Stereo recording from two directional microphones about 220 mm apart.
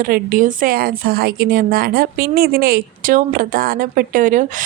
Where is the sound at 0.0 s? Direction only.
40° right (ahead or behind).